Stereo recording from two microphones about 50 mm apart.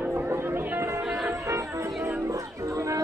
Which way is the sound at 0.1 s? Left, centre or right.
Right.